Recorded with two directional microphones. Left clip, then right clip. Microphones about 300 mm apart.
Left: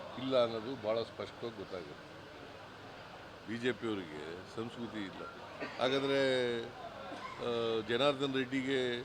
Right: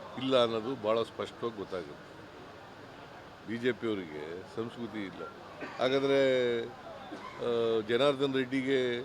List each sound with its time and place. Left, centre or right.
0.2 s speech: right
3.5 s speech: centre